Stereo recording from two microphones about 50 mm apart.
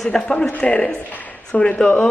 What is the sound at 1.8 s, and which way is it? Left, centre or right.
Speech, centre.